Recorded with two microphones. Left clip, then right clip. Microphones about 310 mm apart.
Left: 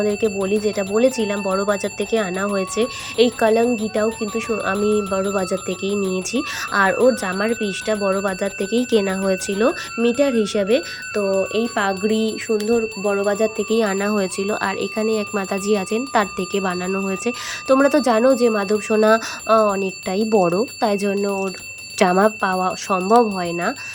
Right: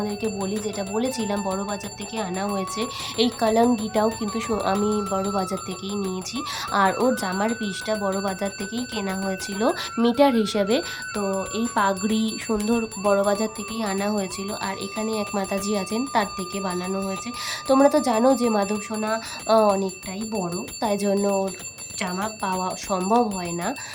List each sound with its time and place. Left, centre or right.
0.0 s speech: centre
21.9 s speech: left
22.4 s speech: centre